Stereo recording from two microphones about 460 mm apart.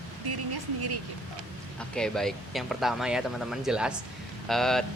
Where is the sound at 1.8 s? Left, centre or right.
Centre.